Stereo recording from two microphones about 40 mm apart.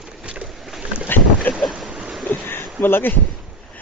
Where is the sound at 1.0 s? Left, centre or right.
Left.